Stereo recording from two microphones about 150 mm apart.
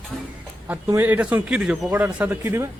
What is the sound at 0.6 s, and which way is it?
A man's voice, 15° right (ahead or behind).